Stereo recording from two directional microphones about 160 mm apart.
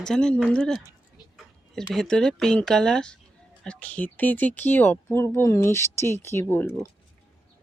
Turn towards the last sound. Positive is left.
turn(degrees=15)  # may be behind; listen again after turning